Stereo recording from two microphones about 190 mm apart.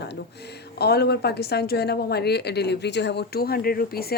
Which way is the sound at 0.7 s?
60° left (ahead or behind).